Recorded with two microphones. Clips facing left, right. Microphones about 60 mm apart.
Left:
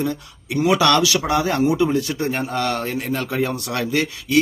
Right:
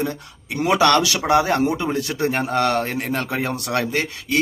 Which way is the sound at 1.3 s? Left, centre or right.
Right.